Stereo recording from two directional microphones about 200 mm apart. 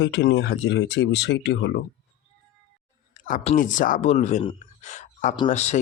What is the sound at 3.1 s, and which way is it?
Speech, 40° left (ahead or behind).